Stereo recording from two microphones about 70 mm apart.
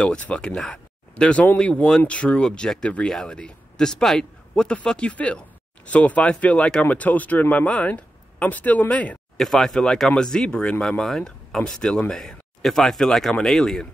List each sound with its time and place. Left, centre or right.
0.0 s speech: centre
9.4 s speech: centre